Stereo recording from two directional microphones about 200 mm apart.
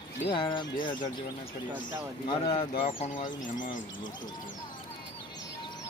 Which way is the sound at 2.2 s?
25° left (ahead or behind).